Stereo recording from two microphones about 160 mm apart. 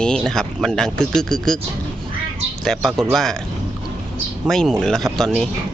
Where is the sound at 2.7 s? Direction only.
5° left (ahead or behind).